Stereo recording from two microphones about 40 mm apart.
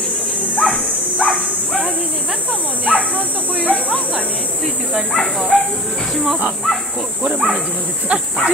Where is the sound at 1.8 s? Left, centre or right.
Right.